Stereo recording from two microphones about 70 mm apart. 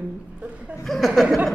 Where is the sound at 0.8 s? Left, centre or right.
Centre.